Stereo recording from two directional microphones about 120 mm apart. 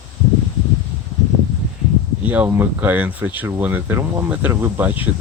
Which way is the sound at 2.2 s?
15° right (ahead or behind).